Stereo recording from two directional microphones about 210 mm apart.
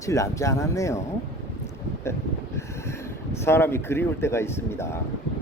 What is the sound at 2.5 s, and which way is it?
Speech, 10° left (ahead or behind).